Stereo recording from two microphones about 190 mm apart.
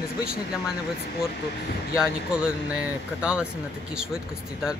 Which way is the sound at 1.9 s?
5° right (ahead or behind).